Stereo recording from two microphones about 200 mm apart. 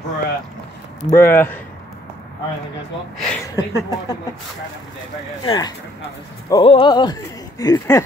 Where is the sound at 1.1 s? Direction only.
10° left (ahead or behind).